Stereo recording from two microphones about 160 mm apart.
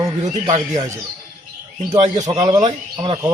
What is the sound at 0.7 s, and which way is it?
Speech, 20° right (ahead or behind).